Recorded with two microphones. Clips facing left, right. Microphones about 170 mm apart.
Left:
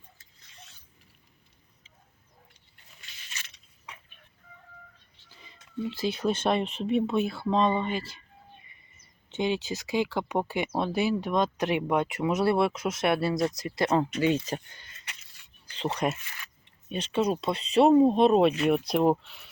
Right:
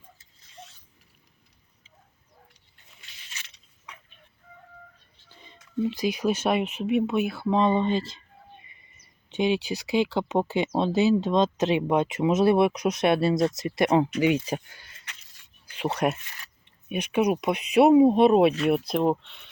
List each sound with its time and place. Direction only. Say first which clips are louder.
5.8 s speech: right 3 dB; 15° right (ahead or behind)
7.5 s speech: right 3 dB; 15° right (ahead or behind)
9.3 s speech: right 4 dB; 15° right (ahead or behind); by 19.5 s 5° left (ahead or behind)